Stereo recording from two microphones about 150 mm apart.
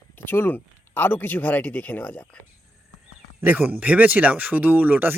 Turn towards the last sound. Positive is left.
turn(degrees=-10)  # may be behind; listen again after turning